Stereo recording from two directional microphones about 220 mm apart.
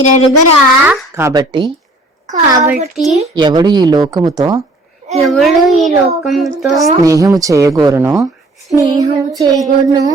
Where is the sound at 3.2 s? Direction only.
20° right (ahead or behind).